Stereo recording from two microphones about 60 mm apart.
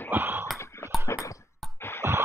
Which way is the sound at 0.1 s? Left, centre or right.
Right.